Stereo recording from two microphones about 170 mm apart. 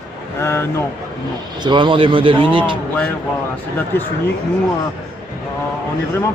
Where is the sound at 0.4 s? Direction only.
15° left (ahead or behind).